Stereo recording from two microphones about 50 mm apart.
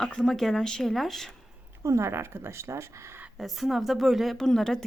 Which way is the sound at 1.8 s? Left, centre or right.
Right.